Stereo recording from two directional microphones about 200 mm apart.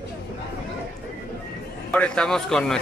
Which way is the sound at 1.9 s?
5° left (ahead or behind).